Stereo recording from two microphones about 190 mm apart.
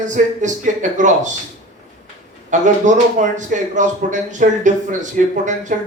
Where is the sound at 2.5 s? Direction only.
40° right (ahead or behind).